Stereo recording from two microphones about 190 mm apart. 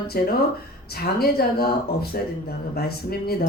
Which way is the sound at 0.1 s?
55° left (ahead or behind).